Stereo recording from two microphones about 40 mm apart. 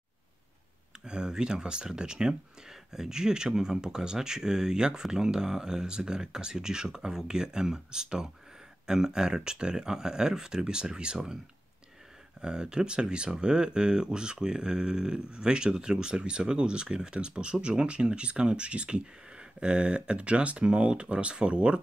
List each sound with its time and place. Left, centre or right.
1.0 s speech: right
12.4 s speech: centre